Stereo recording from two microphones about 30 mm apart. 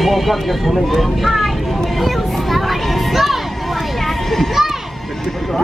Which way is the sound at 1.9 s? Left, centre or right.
Centre.